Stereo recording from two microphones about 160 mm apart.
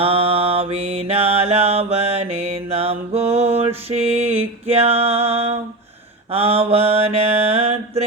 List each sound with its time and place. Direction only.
0.0 s mantra: 35° right (ahead or behind)